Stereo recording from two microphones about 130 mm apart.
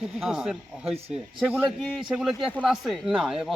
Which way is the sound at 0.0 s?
5° right (ahead or behind).